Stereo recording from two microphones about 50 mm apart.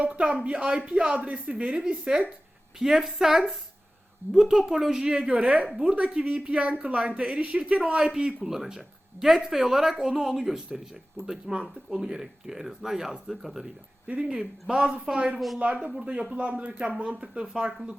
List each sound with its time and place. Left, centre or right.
0.0 s speech: right
2.7 s speech: centre
5.3 s speech: right; by 13.7 s centre
14.1 s speech: centre
15.5 s speech: right
17.4 s speech: centre